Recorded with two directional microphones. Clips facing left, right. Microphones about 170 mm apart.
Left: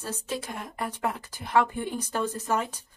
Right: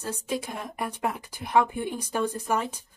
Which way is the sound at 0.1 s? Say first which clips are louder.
Right 3 dB; 15° right (ahead or behind).